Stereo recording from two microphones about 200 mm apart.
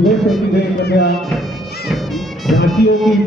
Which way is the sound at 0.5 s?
55° left (ahead or behind).